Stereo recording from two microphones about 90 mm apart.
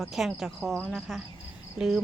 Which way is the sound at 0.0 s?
Centre (ahead or behind).